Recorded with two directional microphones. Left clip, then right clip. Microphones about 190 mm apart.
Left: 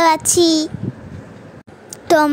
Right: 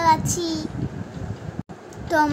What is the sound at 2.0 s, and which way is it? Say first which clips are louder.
Speech: left 7 dB; 50° left (ahead or behind).